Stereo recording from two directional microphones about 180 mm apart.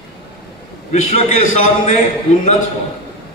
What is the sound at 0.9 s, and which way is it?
A man's voice, 40° left (ahead or behind).